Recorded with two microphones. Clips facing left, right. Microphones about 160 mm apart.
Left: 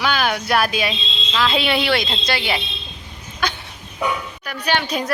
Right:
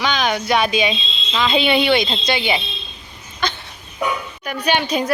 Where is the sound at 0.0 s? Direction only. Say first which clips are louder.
Right 1 dB; 5° left (ahead or behind).